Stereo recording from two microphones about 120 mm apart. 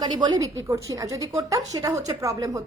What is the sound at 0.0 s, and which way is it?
A woman's voice, 35° right (ahead or behind).